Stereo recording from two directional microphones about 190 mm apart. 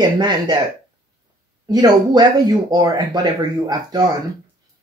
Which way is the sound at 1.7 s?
20° right (ahead or behind).